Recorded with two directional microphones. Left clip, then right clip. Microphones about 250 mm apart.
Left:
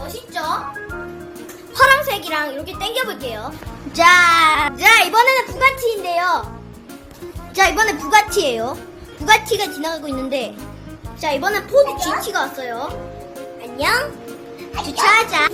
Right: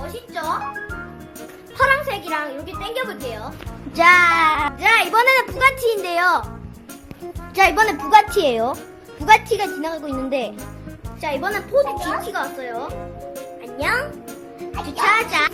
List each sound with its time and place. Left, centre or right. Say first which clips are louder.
1.8 s a woman's voice: left 5 dB; centre
3.9 s a woman's voice: left 2 dB; centre
5.2 s speech: left 1 dB; centre
7.5 s a woman's voice: even; centre
13.7 s music: left 3 dB; centre
14.9 s a woman's voice: left 3 dB; centre